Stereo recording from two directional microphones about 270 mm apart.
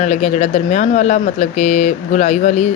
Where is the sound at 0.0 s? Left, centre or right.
Left.